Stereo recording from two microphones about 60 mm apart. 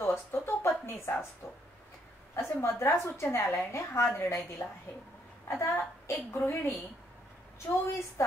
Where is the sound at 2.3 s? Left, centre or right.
Left.